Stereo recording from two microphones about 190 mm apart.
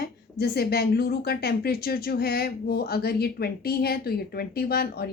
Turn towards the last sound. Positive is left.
turn(degrees=55)  # may be behind; listen again after turning